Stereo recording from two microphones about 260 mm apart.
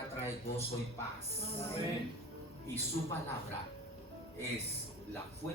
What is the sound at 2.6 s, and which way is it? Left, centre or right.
Speech, centre.